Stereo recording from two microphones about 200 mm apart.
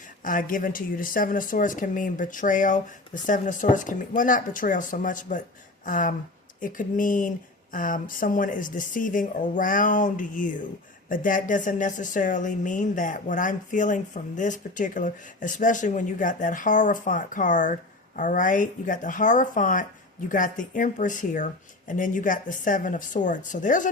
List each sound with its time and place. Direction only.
0.3 s speech: 45° left (ahead or behind)